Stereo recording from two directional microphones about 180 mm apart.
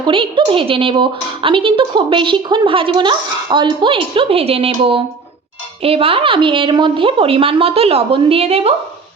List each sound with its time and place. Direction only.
0.0 s a woman's voice: 30° right (ahead or behind)